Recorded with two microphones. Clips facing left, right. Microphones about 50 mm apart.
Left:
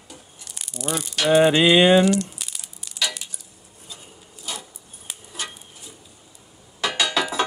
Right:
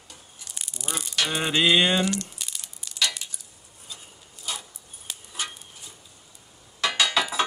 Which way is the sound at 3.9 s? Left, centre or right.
Centre.